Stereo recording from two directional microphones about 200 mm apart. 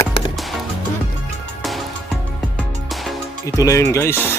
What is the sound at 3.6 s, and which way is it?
Speech, 15° left (ahead or behind).